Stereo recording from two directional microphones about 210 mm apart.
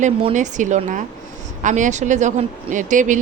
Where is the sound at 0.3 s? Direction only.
35° right (ahead or behind).